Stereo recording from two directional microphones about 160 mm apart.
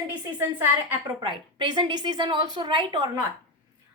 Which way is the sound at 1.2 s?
30° right (ahead or behind).